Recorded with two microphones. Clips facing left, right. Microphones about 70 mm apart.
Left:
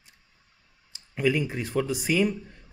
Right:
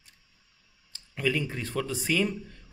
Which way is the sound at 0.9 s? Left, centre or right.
Centre.